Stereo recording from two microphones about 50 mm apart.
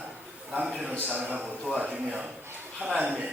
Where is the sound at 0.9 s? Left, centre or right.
Right.